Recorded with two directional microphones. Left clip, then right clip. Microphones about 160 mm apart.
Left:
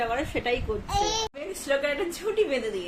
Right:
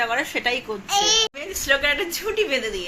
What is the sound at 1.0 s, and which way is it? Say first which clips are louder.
Speech: right 10 dB; 40° left (ahead or behind).